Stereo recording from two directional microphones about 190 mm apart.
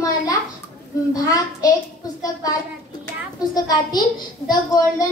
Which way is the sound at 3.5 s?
20° left (ahead or behind).